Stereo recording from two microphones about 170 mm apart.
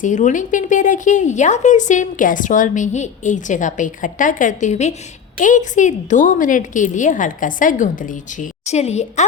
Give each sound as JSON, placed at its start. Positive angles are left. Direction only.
{"t": 0.0, "sound": "a woman's voice", "side_deg": 45}